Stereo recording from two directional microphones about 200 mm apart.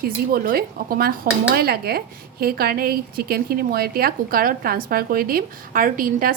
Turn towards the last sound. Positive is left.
turn(degrees=-45)  # may be behind; listen again after turning